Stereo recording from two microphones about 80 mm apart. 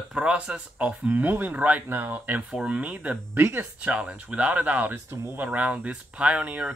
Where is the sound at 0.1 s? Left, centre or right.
Centre.